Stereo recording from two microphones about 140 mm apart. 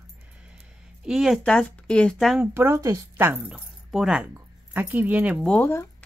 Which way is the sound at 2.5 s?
20° right (ahead or behind).